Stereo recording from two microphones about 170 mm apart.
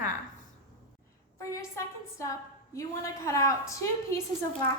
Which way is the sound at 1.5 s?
15° left (ahead or behind).